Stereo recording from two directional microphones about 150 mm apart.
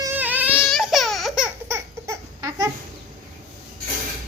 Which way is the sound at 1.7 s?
20° right (ahead or behind).